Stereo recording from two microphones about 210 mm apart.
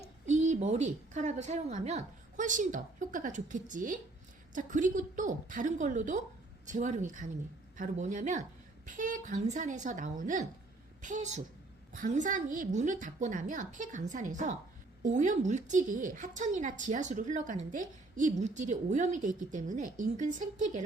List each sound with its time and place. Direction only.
0.3 s a woman's voice: 35° right (ahead or behind)